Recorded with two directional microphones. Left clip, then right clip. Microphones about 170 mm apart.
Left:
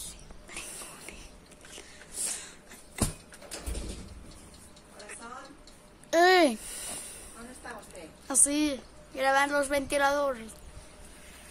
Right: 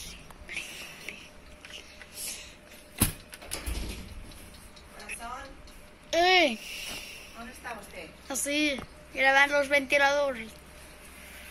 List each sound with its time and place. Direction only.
6.0 s babbling: 30° left (ahead or behind)
7.0 s vehicle: 40° left (ahead or behind)
8.3 s a woman's voice: 20° left (ahead or behind)